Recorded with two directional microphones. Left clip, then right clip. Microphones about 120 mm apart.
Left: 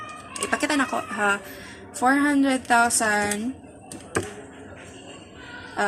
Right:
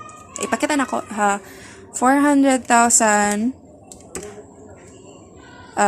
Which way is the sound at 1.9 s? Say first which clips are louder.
Right 5 dB; 85° right.